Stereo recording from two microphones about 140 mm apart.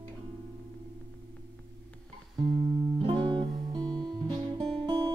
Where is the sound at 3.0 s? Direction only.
35° right (ahead or behind).